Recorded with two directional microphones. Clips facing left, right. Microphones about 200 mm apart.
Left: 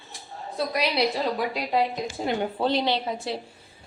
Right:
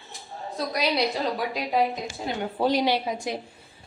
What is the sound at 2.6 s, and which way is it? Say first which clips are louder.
Speech: right 4 dB; 10° right (ahead or behind).